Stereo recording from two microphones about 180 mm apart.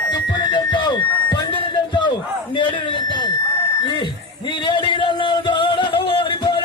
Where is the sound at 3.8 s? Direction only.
25° left (ahead or behind).